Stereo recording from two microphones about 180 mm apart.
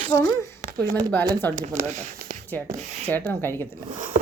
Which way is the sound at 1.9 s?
40° right (ahead or behind).